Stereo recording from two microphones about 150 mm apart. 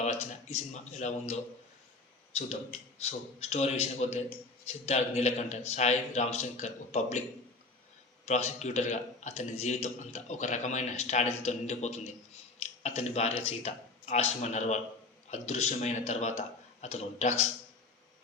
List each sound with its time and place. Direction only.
0.0 s a man's voice: 50° left (ahead or behind)
3.0 s a man's voice: 45° left (ahead or behind)